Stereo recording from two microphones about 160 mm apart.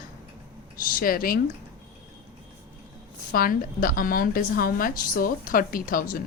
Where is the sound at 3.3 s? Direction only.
65° left (ahead or behind).